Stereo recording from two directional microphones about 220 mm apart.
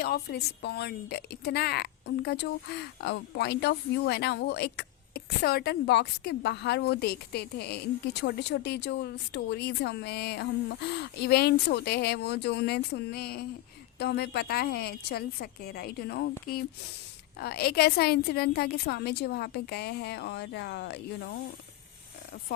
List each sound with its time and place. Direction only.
0.0 s a woman's voice: 45° left (ahead or behind)